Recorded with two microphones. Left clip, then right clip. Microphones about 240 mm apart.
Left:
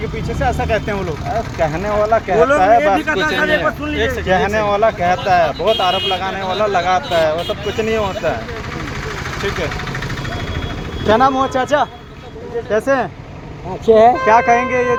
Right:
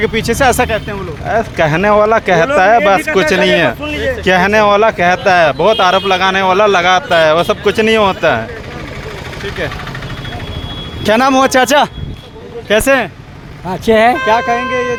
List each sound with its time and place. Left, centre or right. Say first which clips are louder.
0.0 s speech: right 9 dB; right
11.0 s speech: right 3 dB; right
14.3 s speech: left 1 dB; centre